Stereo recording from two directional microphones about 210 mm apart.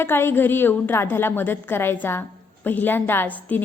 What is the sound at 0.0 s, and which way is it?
A woman's voice, 10° left (ahead or behind).